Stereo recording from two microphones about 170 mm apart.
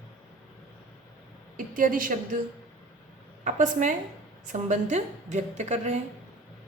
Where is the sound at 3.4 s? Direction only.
50° right (ahead or behind).